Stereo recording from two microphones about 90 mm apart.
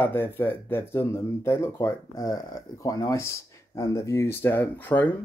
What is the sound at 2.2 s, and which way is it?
Speech, 45° left (ahead or behind).